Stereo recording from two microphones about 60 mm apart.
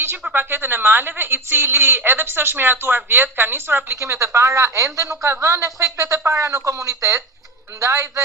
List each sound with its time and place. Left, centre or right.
0.3 s a woman's voice: right
4.0 s speech: right